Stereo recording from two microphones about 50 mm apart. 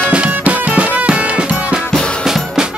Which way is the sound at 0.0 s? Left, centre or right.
Right.